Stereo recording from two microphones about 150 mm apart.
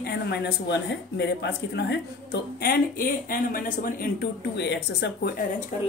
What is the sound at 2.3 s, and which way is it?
Speech, 90° left.